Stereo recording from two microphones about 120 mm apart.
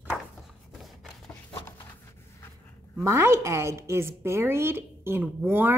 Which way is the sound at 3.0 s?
20° right (ahead or behind).